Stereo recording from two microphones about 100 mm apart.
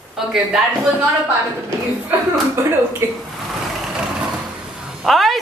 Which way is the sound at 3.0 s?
30° right (ahead or behind).